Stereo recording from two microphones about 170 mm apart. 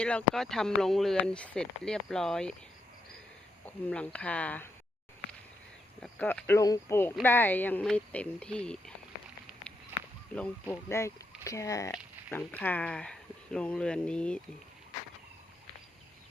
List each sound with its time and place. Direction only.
0.0 s speech: 5° left (ahead or behind)
3.8 s speech: 10° left (ahead or behind)
6.0 s speech: 5° left (ahead or behind)
10.3 s speech: 10° left (ahead or behind)